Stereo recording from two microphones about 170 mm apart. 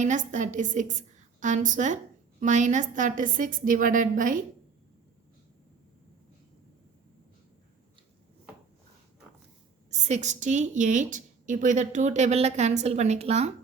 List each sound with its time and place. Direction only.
0.0 s a woman's voice: 45° right (ahead or behind)
9.9 s a woman's voice: 40° right (ahead or behind)